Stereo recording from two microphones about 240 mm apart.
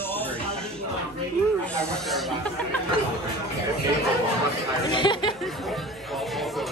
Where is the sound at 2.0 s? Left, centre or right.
Centre.